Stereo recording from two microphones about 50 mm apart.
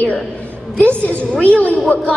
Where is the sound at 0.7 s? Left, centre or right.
Left.